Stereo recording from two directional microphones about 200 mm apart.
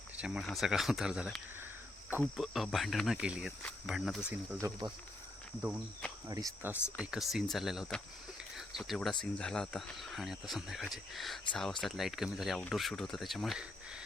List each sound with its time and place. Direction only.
0.2 s speech: 5° right (ahead or behind)
4.6 s speech: 15° right (ahead or behind)
6.2 s speech: 15° right (ahead or behind)
7.0 s speech: centre (ahead or behind)